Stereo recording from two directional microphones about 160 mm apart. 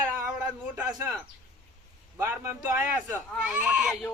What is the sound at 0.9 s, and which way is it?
Speech, 20° right (ahead or behind).